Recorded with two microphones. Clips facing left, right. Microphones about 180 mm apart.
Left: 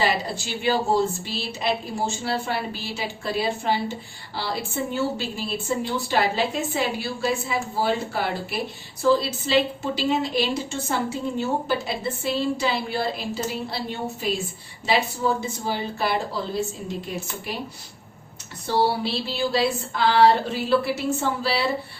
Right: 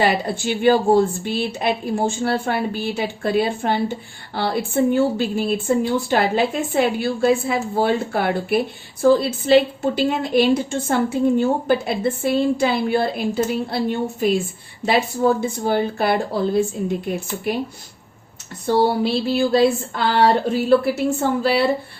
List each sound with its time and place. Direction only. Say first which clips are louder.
0.0 s a woman's voice: right 5 dB; 55° right (ahead or behind)
18.6 s a woman's voice: right 5 dB; 45° right (ahead or behind)